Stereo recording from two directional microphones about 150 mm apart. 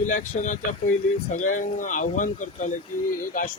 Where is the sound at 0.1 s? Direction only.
55° left (ahead or behind).